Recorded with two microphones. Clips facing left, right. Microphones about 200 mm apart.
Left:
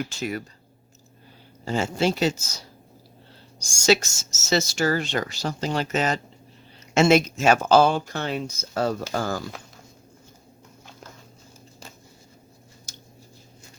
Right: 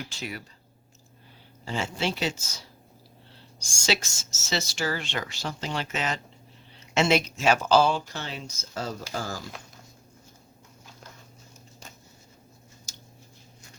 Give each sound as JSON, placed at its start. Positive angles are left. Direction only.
{"t": 0.1, "sound": "speech", "side_deg": 45}
{"t": 1.6, "sound": "speech", "side_deg": 45}
{"t": 12.9, "sound": "a sound", "side_deg": 55}